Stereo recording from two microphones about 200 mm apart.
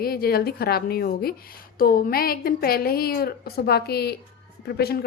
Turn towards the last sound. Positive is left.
turn(degrees=50)  # may be behind; listen again after turning